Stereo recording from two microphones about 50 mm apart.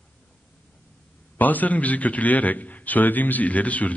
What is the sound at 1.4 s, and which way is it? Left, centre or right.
A man's voice, left.